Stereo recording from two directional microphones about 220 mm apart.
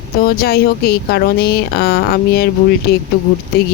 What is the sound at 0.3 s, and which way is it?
Speech, 45° left (ahead or behind).